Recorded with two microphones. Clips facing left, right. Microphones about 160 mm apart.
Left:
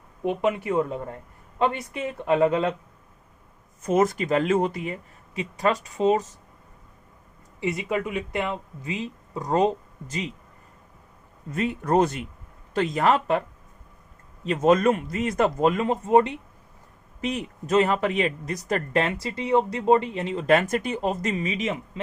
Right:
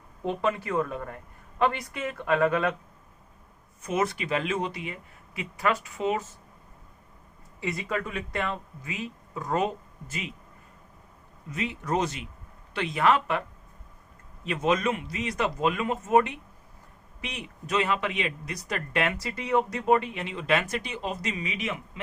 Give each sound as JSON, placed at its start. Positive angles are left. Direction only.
{"t": 0.3, "sound": "speech", "side_deg": 20}
{"t": 3.8, "sound": "speech", "side_deg": 45}
{"t": 7.6, "sound": "speech", "side_deg": 20}
{"t": 11.5, "sound": "a man's voice", "side_deg": 50}
{"t": 12.7, "sound": "speech", "side_deg": 45}
{"t": 14.4, "sound": "a man's voice", "side_deg": 40}
{"t": 17.2, "sound": "speech", "side_deg": 45}